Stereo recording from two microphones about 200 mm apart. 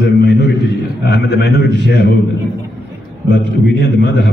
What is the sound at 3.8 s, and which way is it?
Speech, 55° left (ahead or behind).